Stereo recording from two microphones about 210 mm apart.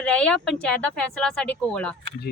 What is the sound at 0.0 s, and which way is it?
Speech, 5° left (ahead or behind).